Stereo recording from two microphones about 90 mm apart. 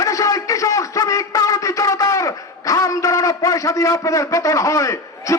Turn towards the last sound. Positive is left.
turn(degrees=35)  # may be behind; listen again after turning